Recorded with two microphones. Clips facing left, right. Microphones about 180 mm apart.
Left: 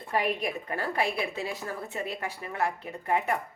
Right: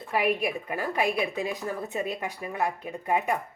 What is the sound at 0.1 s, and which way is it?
Speech, 10° right (ahead or behind).